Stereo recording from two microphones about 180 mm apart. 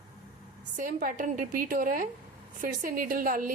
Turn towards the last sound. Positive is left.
turn(degrees=-50)  # may be behind; listen again after turning